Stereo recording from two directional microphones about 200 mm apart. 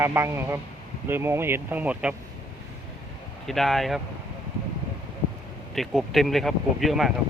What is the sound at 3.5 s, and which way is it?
Speech, centre (ahead or behind).